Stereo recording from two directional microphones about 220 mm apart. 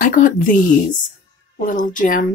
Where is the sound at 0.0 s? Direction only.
35° left (ahead or behind).